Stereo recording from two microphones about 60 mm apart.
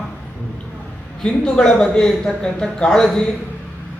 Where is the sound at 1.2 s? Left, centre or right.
Centre.